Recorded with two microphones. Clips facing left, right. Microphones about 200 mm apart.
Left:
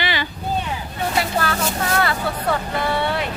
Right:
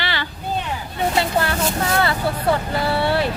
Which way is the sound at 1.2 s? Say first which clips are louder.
Right 1 dB; 25° right (ahead or behind).